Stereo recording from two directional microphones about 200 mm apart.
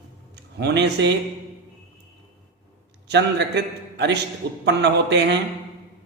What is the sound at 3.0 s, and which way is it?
A man's voice, 60° right (ahead or behind).